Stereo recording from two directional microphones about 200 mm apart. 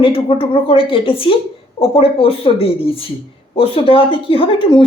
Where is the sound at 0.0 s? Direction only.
30° left (ahead or behind).